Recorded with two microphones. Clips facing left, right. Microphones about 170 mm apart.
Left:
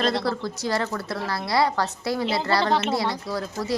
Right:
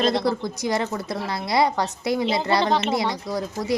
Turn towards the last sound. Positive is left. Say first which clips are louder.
# right 1 dB
turn(degrees=-20)  # may be behind; listen again after turning